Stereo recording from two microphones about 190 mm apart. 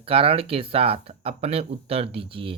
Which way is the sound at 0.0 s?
30° right (ahead or behind).